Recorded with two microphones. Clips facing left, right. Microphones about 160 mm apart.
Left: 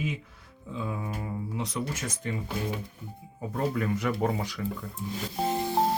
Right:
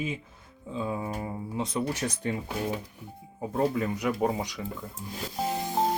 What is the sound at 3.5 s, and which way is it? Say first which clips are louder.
Speech: right 2 dB; 25° right (ahead or behind).